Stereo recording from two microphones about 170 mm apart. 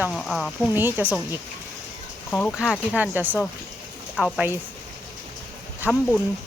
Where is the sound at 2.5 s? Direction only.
5° right (ahead or behind).